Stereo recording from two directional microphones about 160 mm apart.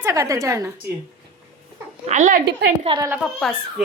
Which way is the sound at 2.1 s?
50° right (ahead or behind).